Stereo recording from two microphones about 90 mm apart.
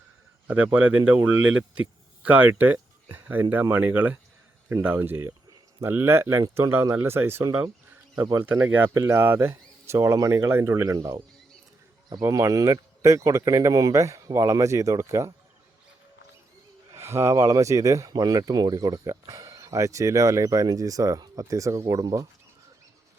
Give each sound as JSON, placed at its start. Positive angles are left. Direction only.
{"t": 0.4, "sound": "speech", "side_deg": -15}
{"t": 2.7, "sound": "a sound", "side_deg": -20}
{"t": 3.5, "sound": "speech", "side_deg": -20}
{"t": 8.5, "sound": "speech", "side_deg": -15}
{"t": 12.2, "sound": "speech", "side_deg": -35}
{"t": 16.9, "sound": "speech", "side_deg": -30}